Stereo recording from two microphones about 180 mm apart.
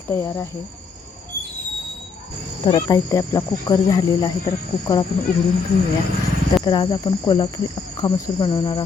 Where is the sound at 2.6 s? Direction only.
20° left (ahead or behind).